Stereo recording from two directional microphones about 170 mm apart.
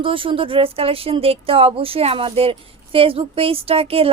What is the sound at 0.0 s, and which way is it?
Speech, 30° right (ahead or behind).